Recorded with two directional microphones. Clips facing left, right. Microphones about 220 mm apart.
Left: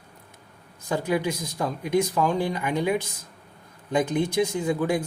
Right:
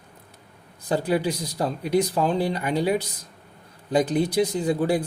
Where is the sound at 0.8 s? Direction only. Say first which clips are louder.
Right 2 dB; 35° right (ahead or behind).